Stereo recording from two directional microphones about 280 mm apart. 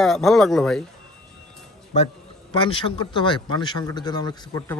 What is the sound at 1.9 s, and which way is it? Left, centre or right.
A man's voice, left.